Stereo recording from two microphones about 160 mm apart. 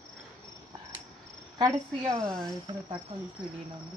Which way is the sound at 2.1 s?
5° left (ahead or behind).